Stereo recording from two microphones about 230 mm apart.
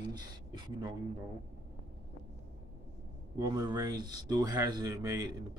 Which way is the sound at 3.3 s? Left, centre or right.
Centre.